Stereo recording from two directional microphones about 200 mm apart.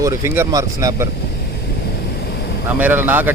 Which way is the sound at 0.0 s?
15° right (ahead or behind).